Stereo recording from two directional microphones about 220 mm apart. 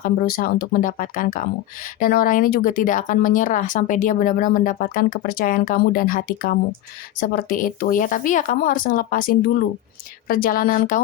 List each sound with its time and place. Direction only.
0.0 s speech: 40° left (ahead or behind)